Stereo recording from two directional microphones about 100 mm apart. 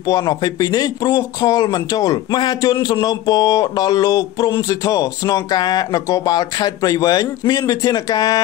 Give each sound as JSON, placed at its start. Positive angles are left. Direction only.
{"t": 0.0, "sound": "speech", "side_deg": 40}